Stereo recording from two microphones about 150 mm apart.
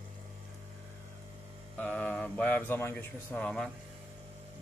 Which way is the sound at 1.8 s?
10° left (ahead or behind).